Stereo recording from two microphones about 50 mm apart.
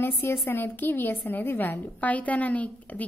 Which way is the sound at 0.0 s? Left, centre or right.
Left.